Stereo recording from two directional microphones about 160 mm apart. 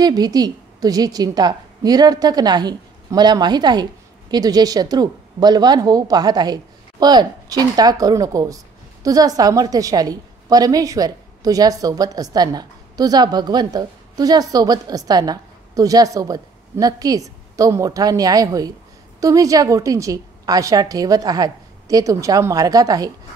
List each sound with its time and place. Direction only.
0.0 s speech: 25° right (ahead or behind)